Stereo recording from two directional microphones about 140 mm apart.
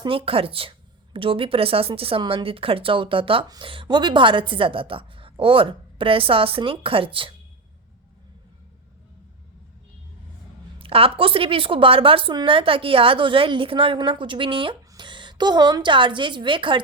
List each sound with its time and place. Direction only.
0.0 s a woman's voice: 40° right (ahead or behind)
10.8 s a woman's voice: 40° right (ahead or behind)